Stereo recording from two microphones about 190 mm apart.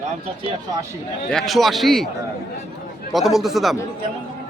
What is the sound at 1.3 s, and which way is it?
Speech, centre (ahead or behind).